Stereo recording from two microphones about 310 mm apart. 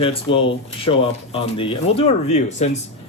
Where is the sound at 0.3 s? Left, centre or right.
Left.